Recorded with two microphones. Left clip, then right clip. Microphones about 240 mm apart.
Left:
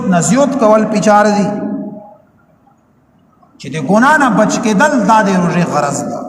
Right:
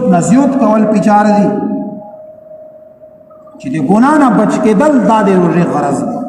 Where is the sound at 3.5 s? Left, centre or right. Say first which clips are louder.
Right 1 dB; left.